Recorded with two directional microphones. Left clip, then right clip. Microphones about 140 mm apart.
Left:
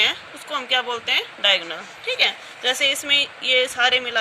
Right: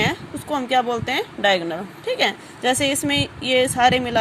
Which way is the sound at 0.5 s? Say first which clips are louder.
Right 2 dB; 35° right (ahead or behind).